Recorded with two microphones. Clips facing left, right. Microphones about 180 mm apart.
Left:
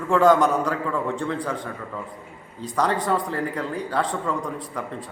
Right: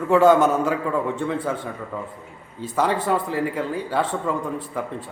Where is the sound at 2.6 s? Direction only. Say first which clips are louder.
Right 1 dB; 5° right (ahead or behind).